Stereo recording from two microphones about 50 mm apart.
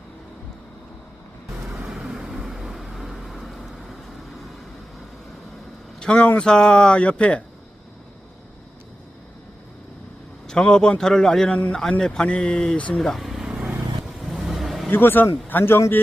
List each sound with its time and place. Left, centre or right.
1.8 s vehicle: centre
6.0 s vehicle: centre
6.4 s speech: centre
10.4 s a man's voice: centre
13.0 s speech: centre
14.2 s vehicle: centre
14.8 s a man's voice: left